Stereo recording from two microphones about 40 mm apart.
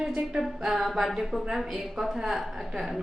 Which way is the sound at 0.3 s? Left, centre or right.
Centre.